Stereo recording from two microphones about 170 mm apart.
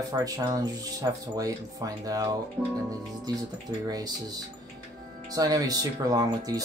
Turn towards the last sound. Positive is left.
turn(degrees=-20)  # may be behind; listen again after turning